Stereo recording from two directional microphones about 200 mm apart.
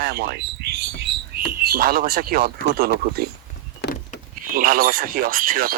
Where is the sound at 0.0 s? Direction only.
50° right (ahead or behind).